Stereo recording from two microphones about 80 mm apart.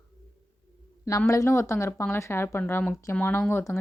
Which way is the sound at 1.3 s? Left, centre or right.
Left.